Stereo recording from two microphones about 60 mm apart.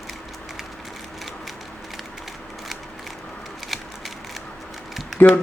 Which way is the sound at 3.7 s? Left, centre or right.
Centre.